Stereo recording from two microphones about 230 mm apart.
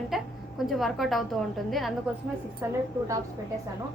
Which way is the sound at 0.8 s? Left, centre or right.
Centre.